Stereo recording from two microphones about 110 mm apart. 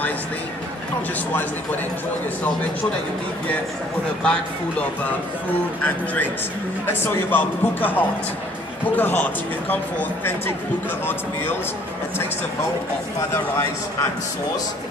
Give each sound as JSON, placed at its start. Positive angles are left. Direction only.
{"t": 4.2, "sound": "speech", "side_deg": 10}
{"t": 6.9, "sound": "speech", "side_deg": 20}